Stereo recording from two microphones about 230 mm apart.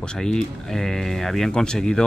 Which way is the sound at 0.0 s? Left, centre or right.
Centre.